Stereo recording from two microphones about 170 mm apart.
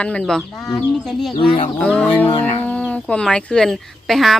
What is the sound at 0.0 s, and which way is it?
Speech, 5° left (ahead or behind).